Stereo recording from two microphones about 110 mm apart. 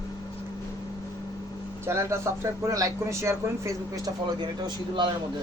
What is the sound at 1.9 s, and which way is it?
Speech, 25° right (ahead or behind).